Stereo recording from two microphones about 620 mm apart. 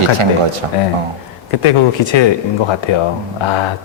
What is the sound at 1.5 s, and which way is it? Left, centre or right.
A man's voice, left.